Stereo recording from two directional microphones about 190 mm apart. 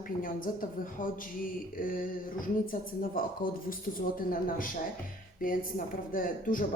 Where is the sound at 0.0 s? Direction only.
45° left (ahead or behind).